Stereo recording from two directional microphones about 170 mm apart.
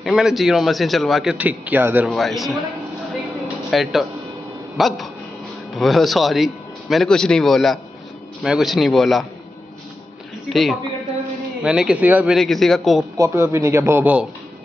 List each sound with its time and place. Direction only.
0.0 s speech: centre (ahead or behind)
2.0 s speech: centre (ahead or behind)
3.7 s speech: centre (ahead or behind)
10.5 s speech: centre (ahead or behind)
13.1 s speech: 15° right (ahead or behind)